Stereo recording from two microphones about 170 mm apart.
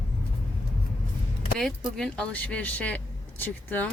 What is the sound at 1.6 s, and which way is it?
Speech, 5° left (ahead or behind).